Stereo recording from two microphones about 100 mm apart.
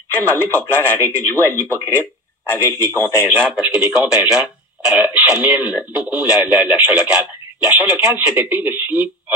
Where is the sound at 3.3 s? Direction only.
15° right (ahead or behind).